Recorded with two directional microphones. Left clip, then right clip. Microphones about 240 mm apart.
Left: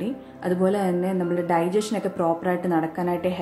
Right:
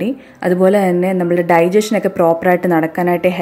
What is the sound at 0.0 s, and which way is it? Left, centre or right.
A woman's voice, right.